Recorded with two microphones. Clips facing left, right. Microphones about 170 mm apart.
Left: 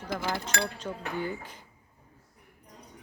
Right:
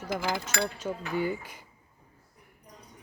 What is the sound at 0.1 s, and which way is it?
Speech, 10° right (ahead or behind).